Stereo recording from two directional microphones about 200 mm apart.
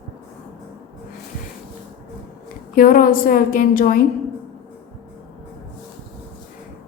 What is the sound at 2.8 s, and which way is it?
A woman's voice, 45° left (ahead or behind).